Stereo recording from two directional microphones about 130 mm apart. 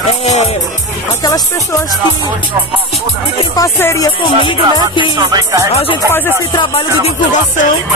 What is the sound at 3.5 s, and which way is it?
Speech, 25° left (ahead or behind).